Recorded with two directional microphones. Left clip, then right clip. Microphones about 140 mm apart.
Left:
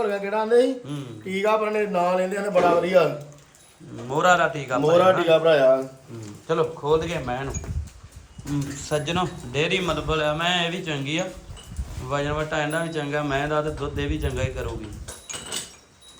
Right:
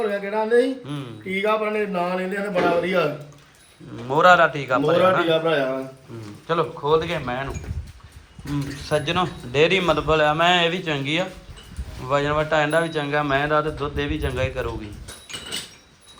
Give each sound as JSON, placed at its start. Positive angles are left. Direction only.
{"t": 0.0, "sound": "speech", "side_deg": 30}
{"t": 1.5, "sound": "a man's voice", "side_deg": 40}
{"t": 4.2, "sound": "a man's voice", "side_deg": 15}
{"t": 5.2, "sound": "a man's voice", "side_deg": 55}
{"t": 6.5, "sound": "speech", "side_deg": 25}
{"t": 8.9, "sound": "a man's voice", "side_deg": 20}